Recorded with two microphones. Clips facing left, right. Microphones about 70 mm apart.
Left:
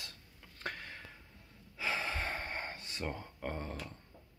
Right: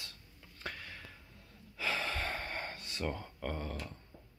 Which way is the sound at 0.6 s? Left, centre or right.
Left.